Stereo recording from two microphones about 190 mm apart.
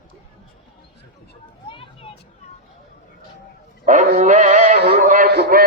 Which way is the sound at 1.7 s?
25° left (ahead or behind).